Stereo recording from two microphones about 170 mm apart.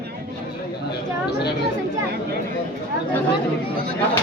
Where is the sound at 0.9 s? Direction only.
75° left (ahead or behind).